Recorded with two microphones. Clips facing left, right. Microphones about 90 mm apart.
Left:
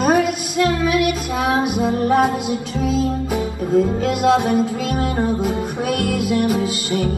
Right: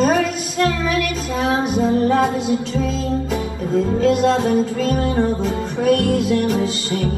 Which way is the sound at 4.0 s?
30° right (ahead or behind).